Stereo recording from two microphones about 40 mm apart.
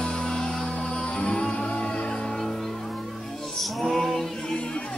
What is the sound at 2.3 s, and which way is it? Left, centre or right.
Music, centre.